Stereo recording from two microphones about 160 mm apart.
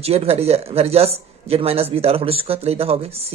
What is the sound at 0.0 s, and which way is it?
Speech, 40° right (ahead or behind).